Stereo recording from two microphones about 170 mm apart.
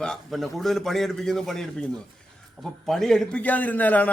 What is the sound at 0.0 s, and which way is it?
A man's voice, centre (ahead or behind).